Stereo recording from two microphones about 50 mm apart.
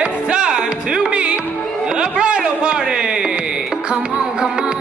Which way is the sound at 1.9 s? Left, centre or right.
Centre.